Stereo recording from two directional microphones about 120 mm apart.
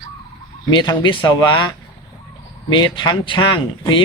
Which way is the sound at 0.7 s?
40° left (ahead or behind).